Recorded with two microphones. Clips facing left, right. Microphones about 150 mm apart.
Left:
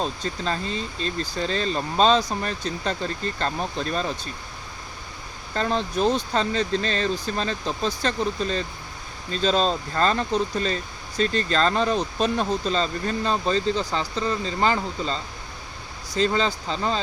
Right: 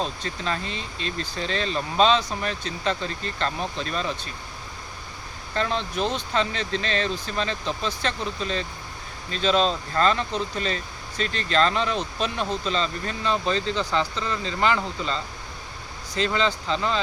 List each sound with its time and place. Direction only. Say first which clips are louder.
0.2 s speech: left 2 dB; 35° left (ahead or behind)
3.3 s speech: left 1 dB; 40° left (ahead or behind)
5.5 s speech: left 2 dB; 40° left (ahead or behind)